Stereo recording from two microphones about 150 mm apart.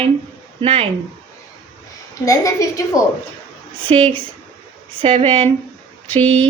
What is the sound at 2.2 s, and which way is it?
Speech, 20° left (ahead or behind).